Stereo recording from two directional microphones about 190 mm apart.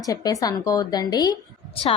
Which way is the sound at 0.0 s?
20° left (ahead or behind).